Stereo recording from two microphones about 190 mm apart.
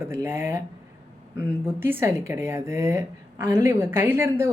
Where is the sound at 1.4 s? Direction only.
10° right (ahead or behind).